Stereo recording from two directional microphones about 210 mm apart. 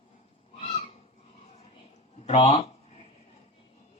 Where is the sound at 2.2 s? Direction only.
25° left (ahead or behind).